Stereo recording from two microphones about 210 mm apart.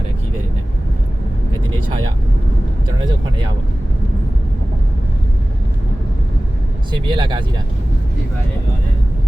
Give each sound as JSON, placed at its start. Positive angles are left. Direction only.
{"t": 7.1, "sound": "speech", "side_deg": -20}